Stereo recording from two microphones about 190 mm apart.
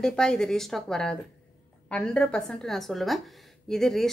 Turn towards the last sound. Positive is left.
turn(degrees=0)  # may be behind; listen again after turning